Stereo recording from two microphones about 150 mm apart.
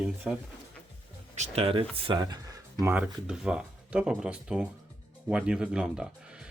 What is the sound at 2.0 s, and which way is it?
Speech, 25° right (ahead or behind).